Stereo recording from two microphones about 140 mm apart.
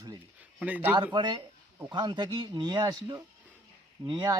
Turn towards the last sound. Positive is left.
turn(degrees=-30)  # may be behind; listen again after turning